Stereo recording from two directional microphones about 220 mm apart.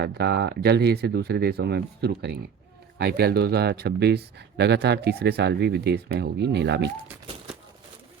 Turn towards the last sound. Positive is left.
turn(degrees=-50)  # may be behind; listen again after turning